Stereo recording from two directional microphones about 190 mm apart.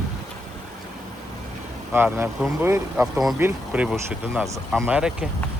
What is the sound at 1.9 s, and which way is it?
Speech, 10° right (ahead or behind).